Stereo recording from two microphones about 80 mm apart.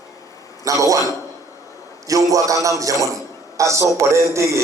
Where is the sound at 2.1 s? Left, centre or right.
Right.